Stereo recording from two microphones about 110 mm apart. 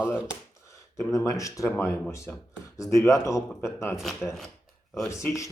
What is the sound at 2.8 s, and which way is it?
A man's voice, 30° left (ahead or behind).